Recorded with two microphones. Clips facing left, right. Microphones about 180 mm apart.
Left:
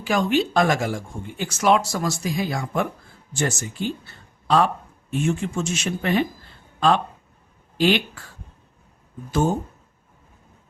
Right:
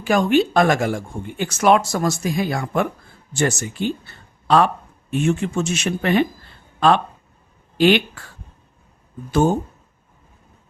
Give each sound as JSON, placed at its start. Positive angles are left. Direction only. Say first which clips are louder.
{"t": 0.0, "sound": "speech", "louder": "right 4 dB", "side_deg": -50}